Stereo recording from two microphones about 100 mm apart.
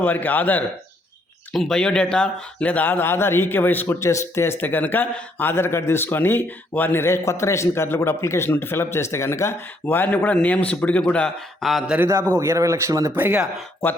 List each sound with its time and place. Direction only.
0.0 s speech: 20° left (ahead or behind)
1.5 s speech: 5° left (ahead or behind)
12.3 s speech: 30° right (ahead or behind)
13.1 s speech: 20° right (ahead or behind)